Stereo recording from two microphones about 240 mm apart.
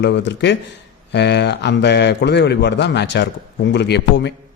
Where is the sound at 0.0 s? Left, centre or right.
Left.